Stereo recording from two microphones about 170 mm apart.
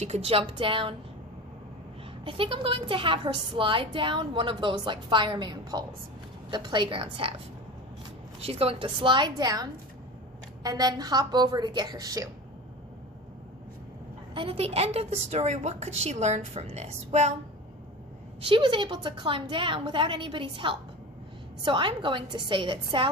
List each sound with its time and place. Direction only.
0.0 s a woman's voice: 40° right (ahead or behind)
2.2 s a woman's voice: 30° right (ahead or behind)
8.4 s a woman's voice: 35° right (ahead or behind); by 12.3 s 20° right (ahead or behind)
14.3 s a woman's voice: 30° right (ahead or behind)
18.4 s a woman's voice: 30° right (ahead or behind)